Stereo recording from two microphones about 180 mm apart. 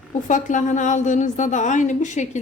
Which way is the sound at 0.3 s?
45° left (ahead or behind).